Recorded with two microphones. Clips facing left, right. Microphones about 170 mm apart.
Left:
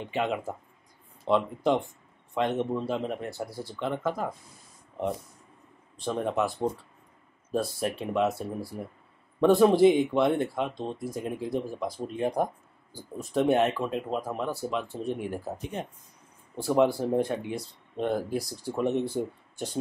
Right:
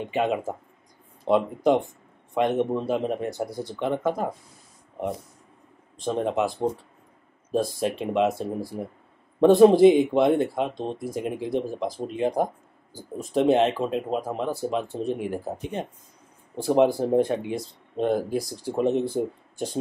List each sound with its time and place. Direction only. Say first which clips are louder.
0.0 s speech: right 4 dB; 15° right (ahead or behind)
6.0 s speech: right 3 dB; 20° right (ahead or behind)
19.1 s speech: right 4 dB; 15° right (ahead or behind)